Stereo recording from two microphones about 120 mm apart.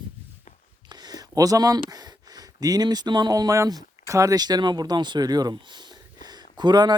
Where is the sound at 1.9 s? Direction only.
35° right (ahead or behind).